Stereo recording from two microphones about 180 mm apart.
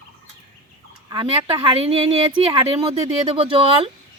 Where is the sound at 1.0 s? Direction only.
30° right (ahead or behind).